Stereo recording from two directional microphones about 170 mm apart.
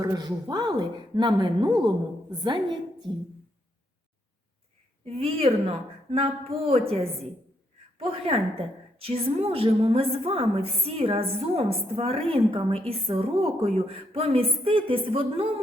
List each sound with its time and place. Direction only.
0.0 s a woman's voice: 25° right (ahead or behind)
5.0 s a woman's voice: 35° right (ahead or behind)